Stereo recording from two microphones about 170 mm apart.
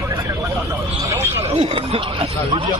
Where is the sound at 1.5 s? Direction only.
35° right (ahead or behind).